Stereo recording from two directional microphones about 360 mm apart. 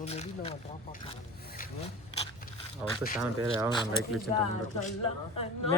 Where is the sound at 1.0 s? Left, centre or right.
Centre.